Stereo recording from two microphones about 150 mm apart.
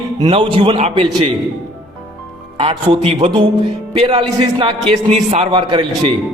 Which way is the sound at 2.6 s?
40° right (ahead or behind).